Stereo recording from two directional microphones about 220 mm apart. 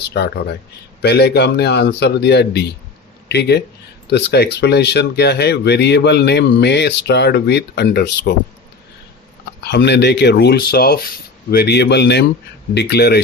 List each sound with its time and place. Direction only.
0.0 s speech: 50° left (ahead or behind)
9.6 s speech: 50° left (ahead or behind)